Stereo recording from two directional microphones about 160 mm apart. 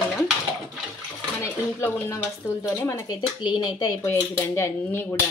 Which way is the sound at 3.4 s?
30° left (ahead or behind).